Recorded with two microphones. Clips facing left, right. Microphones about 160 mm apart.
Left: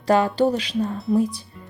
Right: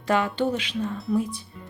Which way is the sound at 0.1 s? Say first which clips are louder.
Left 5 dB; 35° left (ahead or behind).